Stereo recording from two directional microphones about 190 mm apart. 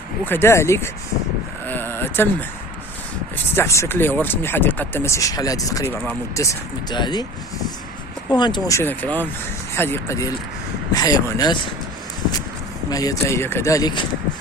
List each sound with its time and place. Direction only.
0.3 s speech: 10° left (ahead or behind)
1.6 s a sound: 10° left (ahead or behind)
3.3 s speech: 15° left (ahead or behind)
8.3 s speech: 25° left (ahead or behind)
12.9 s speech: 20° left (ahead or behind)